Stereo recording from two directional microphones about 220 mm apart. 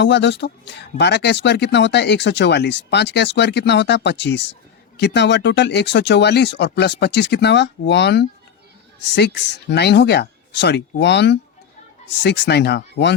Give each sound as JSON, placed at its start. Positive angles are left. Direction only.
{"t": 0.0, "sound": "speech", "side_deg": 50}